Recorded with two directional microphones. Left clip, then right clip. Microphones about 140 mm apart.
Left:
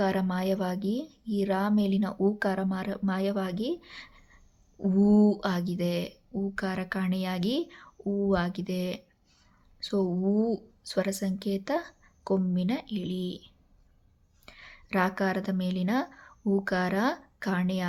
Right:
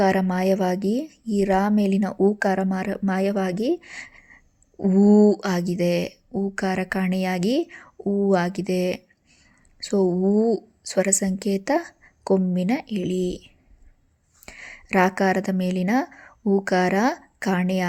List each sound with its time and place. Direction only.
0.0 s a woman's voice: 45° right (ahead or behind)
14.4 s a woman's voice: 50° right (ahead or behind)